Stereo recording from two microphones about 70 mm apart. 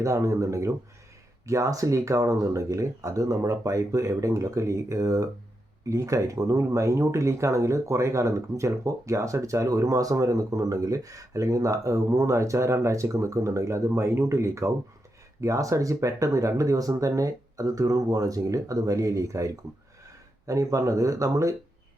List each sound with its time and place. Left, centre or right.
0.0 s speech: right
20.5 s speech: right